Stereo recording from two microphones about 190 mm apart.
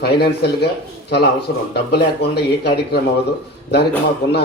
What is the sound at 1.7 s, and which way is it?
A man's voice, 60° left (ahead or behind).